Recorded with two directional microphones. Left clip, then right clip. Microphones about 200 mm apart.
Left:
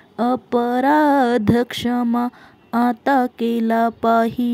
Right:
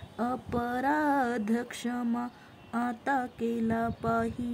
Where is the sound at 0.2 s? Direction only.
35° left (ahead or behind).